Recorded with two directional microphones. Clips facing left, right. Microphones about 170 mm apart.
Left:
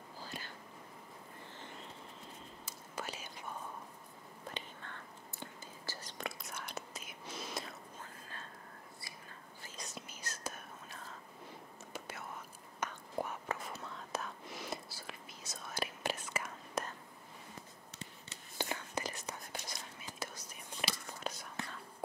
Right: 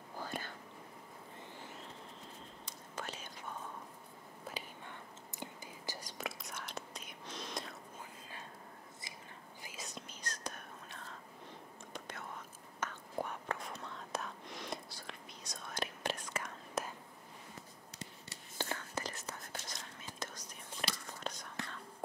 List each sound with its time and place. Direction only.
0.2 s whispering: 50° right (ahead or behind)
2.6 s whispering: 5° left (ahead or behind)
4.5 s whispering: 10° right (ahead or behind)
8.0 s whispering: 15° right (ahead or behind)
9.6 s whispering: 10° right (ahead or behind)
9.8 s whispering: 5° left (ahead or behind)
18.3 s whispering: 15° left (ahead or behind)